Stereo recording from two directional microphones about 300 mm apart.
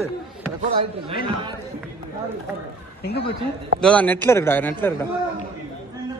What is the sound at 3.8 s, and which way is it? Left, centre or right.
A man's voice, centre.